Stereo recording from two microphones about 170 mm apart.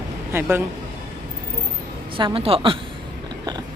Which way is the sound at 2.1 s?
30° right (ahead or behind).